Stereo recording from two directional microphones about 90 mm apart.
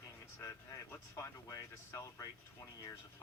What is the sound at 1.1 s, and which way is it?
Speech, 35° left (ahead or behind).